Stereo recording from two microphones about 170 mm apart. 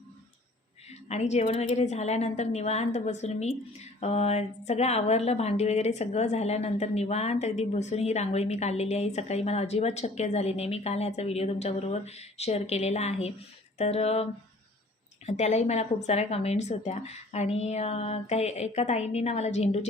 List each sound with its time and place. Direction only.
0.9 s a woman's voice: 40° left (ahead or behind)
15.3 s a woman's voice: 40° left (ahead or behind)